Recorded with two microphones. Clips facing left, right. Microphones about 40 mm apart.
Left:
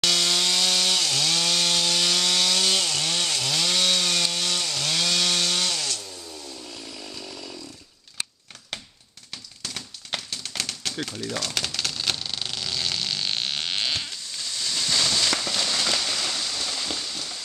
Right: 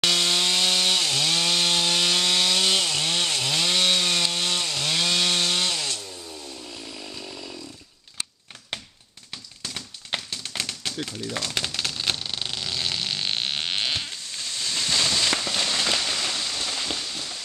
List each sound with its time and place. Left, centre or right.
0.0 s chainsaw: centre
6.5 s chainsaw: centre
9.3 s typewriter: centre
11.0 s speech: centre
11.3 s typewriter: centre